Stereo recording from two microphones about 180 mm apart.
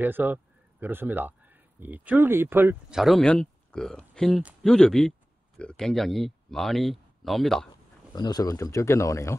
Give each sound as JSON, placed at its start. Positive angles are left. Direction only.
{"t": 0.0, "sound": "a man's voice", "side_deg": -10}
{"t": 8.1, "sound": "speech", "side_deg": 20}